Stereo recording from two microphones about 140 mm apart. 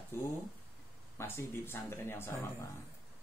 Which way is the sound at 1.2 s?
20° left (ahead or behind).